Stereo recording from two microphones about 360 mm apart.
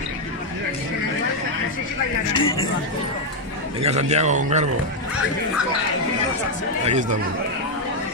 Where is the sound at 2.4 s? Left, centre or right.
Centre.